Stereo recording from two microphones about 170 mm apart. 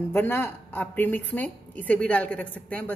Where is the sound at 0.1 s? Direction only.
15° left (ahead or behind).